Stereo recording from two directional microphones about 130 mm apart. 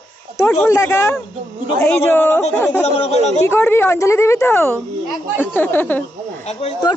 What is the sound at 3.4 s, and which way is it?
A woman's voice, 20° left (ahead or behind).